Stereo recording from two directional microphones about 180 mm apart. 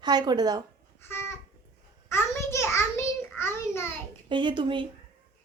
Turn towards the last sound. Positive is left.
turn(degrees=-25)  # may be behind; listen again after turning